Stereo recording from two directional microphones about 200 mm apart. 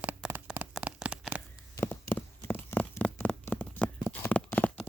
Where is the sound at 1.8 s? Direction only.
10° left (ahead or behind).